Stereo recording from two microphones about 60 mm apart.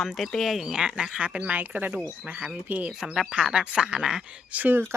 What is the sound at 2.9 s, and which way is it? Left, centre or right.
Speech, centre.